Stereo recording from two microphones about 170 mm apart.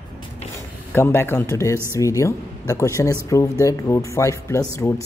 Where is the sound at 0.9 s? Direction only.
15° left (ahead or behind).